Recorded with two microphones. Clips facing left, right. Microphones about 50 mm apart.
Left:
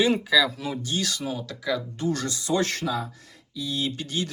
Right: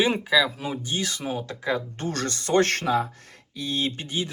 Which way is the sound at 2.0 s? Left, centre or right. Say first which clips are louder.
Left 1 dB; right.